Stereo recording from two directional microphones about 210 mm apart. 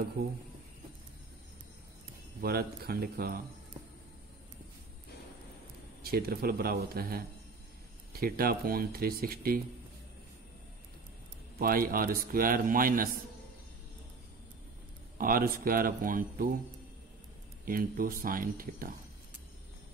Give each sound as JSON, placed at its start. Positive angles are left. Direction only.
{"t": 2.4, "sound": "a man's voice", "side_deg": -45}
{"t": 6.0, "sound": "a man's voice", "side_deg": -45}
{"t": 11.5, "sound": "a man's voice", "side_deg": -45}
{"t": 15.1, "sound": "a man's voice", "side_deg": -45}
{"t": 17.6, "sound": "a man's voice", "side_deg": -45}